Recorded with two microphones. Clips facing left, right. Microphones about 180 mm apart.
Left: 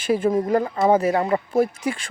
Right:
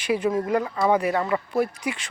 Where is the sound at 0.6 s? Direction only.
25° left (ahead or behind).